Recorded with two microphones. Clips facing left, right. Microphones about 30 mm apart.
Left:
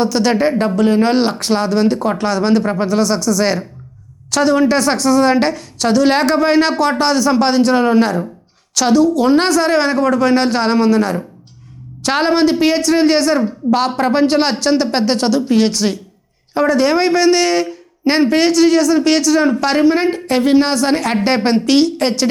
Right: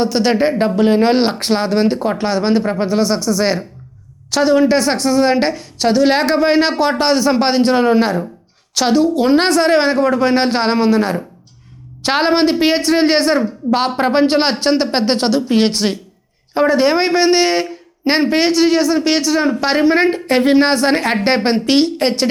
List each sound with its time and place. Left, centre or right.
0.0 s a woman's voice: centre
0.8 s a woman's voice: right
8.7 s a woman's voice: right